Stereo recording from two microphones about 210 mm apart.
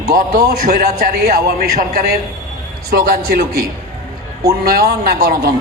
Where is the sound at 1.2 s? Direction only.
50° right (ahead or behind).